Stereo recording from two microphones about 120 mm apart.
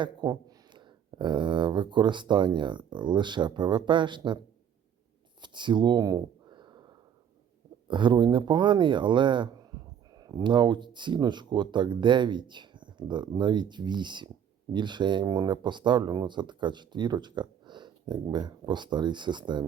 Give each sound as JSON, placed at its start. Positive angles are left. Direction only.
{"t": 0.0, "sound": "speech", "side_deg": -35}
{"t": 5.4, "sound": "a sound", "side_deg": -40}
{"t": 7.9, "sound": "speech", "side_deg": -40}